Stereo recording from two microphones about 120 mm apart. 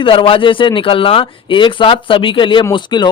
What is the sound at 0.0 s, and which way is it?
Speech, 45° left (ahead or behind).